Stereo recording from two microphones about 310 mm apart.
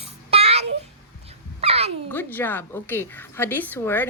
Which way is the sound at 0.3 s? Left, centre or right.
Centre.